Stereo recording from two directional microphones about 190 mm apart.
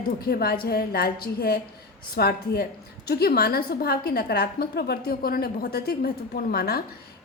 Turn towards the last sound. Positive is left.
turn(degrees=55)  # may be behind; listen again after turning